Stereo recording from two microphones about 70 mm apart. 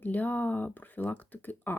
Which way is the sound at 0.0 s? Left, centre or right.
Left.